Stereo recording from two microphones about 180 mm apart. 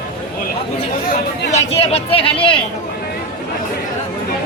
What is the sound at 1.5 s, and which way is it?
Chatter, 35° left (ahead or behind).